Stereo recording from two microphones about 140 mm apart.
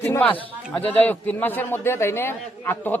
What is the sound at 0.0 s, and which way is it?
A man's voice, 15° left (ahead or behind).